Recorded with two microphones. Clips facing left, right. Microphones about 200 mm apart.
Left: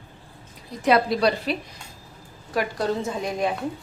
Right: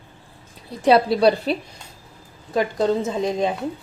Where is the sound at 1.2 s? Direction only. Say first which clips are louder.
Right 5 dB; 30° right (ahead or behind).